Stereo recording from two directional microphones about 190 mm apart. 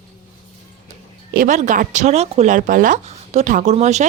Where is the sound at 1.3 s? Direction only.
40° right (ahead or behind).